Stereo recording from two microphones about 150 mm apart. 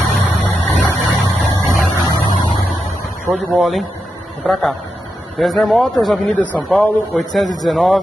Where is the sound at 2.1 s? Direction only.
30° left (ahead or behind).